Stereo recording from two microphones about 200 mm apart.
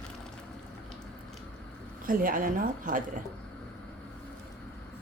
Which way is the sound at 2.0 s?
45° right (ahead or behind).